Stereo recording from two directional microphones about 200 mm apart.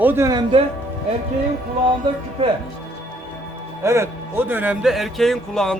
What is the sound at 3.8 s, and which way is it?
A man's voice, 15° right (ahead or behind).